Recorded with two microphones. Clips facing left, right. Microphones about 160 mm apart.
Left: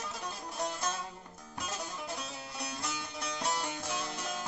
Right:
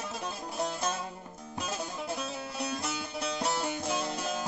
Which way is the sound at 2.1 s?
25° right (ahead or behind).